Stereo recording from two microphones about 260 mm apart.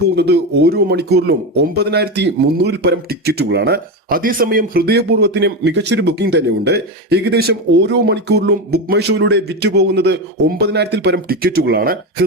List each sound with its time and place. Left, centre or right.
0.2 s speech: right